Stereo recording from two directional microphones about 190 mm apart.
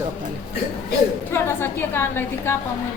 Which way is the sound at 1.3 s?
10° left (ahead or behind).